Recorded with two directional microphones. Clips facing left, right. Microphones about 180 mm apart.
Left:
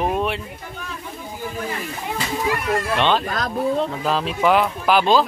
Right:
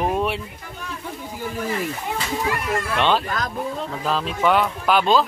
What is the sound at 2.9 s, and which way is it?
Speech, 10° right (ahead or behind).